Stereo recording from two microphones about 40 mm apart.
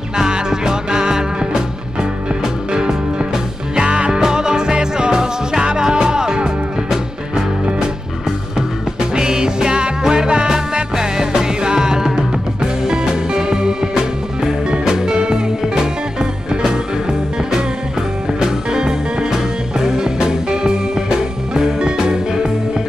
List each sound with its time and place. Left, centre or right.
0.2 s music: centre
9.1 s music: centre
18.4 s music: centre